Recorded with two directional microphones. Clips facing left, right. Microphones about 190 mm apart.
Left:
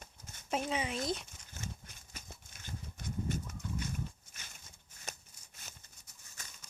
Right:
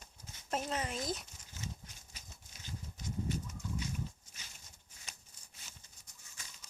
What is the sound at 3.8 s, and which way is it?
Dog, 55° left (ahead or behind).